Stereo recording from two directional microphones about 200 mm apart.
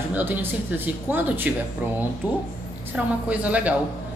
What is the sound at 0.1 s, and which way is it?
Speech, 10° right (ahead or behind).